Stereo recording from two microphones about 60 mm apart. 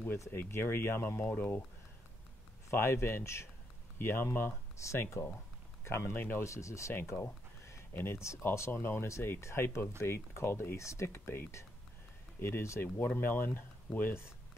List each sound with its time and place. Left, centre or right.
0.3 s speech: left
2.7 s speech: left
4.8 s speech: left
5.2 s speech: left
6.1 s speech: left
6.4 s speech: left
6.9 s a sound: left
7.9 s speech: left
8.2 s speech: left
10.8 s speech: left
11.1 s speech: left
12.8 s speech: left